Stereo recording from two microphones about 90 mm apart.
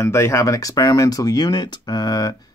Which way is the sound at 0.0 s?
35° left (ahead or behind).